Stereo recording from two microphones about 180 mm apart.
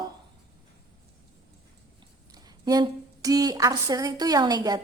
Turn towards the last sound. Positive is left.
turn(degrees=-20)  # may be behind; listen again after turning